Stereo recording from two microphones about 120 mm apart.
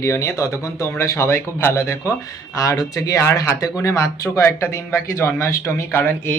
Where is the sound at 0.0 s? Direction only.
25° left (ahead or behind).